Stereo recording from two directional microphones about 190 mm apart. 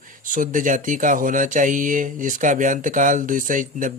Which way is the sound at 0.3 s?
45° right (ahead or behind).